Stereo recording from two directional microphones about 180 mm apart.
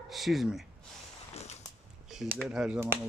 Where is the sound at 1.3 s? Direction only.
35° left (ahead or behind).